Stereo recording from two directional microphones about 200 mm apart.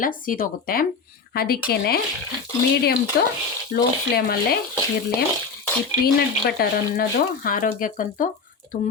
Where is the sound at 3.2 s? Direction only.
55° left (ahead or behind).